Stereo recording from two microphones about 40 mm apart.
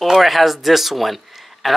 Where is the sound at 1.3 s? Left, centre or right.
Centre.